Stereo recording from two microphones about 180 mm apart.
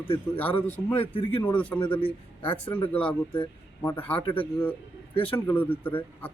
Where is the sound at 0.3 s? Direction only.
10° left (ahead or behind).